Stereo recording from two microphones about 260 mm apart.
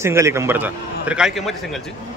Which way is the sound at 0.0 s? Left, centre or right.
Centre.